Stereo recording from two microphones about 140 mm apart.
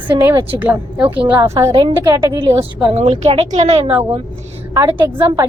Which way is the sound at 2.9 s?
50° right (ahead or behind).